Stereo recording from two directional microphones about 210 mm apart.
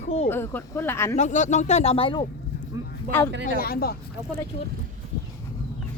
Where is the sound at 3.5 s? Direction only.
45° left (ahead or behind).